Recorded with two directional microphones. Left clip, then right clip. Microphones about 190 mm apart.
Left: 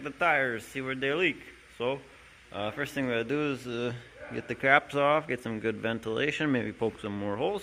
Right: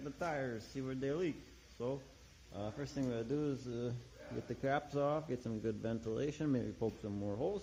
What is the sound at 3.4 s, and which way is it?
Speech, 40° left (ahead or behind).